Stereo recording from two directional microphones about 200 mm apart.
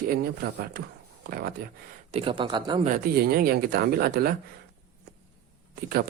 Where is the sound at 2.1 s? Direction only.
25° right (ahead or behind).